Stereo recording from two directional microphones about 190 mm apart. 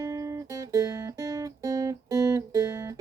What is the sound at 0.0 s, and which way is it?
Music, 15° right (ahead or behind).